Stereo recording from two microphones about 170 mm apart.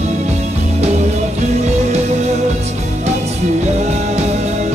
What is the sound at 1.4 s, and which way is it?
Music, 40° right (ahead or behind).